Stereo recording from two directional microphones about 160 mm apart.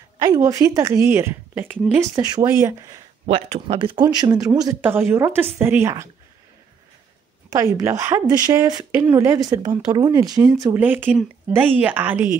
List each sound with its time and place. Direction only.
0.2 s a woman's voice: 25° right (ahead or behind)
2.1 s speech: 25° right (ahead or behind)
3.3 s speech: 40° right (ahead or behind); by 4.5 s 25° right (ahead or behind)
4.8 s a woman's voice: 15° right (ahead or behind)
7.4 s a woman's voice: 20° right (ahead or behind)